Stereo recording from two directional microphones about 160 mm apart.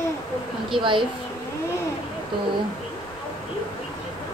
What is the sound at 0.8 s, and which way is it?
Speech, 30° right (ahead or behind).